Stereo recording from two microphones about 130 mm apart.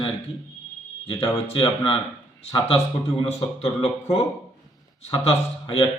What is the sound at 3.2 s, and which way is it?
Speech, 45° left (ahead or behind).